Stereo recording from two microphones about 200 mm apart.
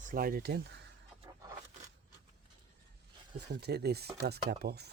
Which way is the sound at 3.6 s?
55° right (ahead or behind).